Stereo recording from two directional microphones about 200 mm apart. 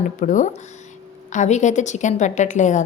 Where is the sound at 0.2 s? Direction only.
40° left (ahead or behind).